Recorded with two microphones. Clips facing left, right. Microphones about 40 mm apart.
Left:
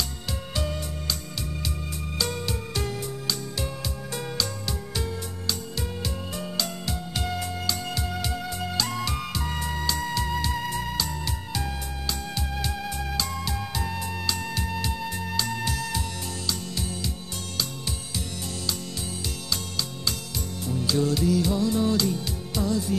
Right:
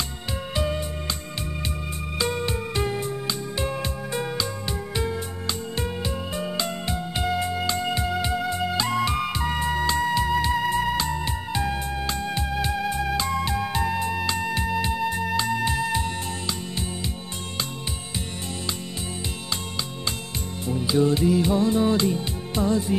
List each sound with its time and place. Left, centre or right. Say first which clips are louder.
0.6 s music: right 5 dB; right
2.1 s music: right 4 dB; right
5.8 s music: right 4 dB; right
10.0 s music: right 6 dB; centre
10.7 s music: right 6 dB; right
13.1 s music: right 6 dB; right
20.6 s music: right 4 dB; right